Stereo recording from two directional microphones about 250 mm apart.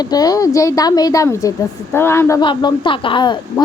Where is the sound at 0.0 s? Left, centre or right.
Centre.